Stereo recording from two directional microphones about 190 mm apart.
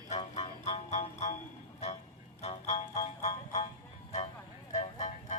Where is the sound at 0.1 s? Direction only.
35° left (ahead or behind).